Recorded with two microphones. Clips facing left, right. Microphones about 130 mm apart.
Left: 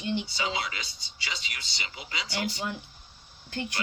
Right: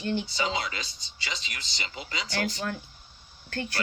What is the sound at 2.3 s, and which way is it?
Speech, 20° left (ahead or behind).